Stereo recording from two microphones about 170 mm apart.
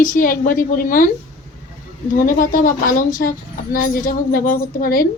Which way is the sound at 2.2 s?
55° left (ahead or behind).